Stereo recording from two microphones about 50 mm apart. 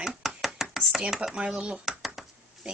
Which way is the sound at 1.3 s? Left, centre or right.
Centre.